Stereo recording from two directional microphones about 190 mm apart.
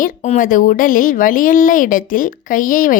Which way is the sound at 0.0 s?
40° left (ahead or behind).